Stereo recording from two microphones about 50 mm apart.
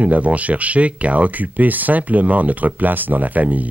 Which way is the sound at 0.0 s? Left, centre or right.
Right.